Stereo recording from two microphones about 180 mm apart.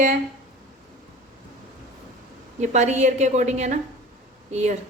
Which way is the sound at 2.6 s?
40° right (ahead or behind).